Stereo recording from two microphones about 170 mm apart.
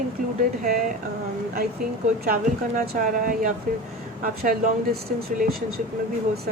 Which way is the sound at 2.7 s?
50° right (ahead or behind).